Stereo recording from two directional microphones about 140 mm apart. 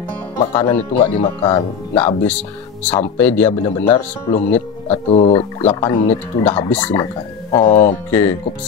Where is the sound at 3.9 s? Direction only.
50° left (ahead or behind).